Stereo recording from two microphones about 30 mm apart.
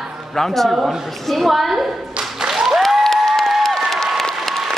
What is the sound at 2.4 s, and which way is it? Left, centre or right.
Applause, centre.